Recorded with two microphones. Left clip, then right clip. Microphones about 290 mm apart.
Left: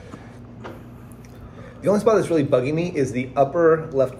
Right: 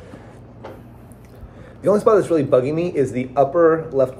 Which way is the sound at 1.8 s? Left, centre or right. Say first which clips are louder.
Right 3 dB; centre.